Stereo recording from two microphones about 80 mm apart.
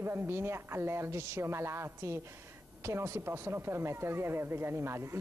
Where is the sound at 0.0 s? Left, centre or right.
Right.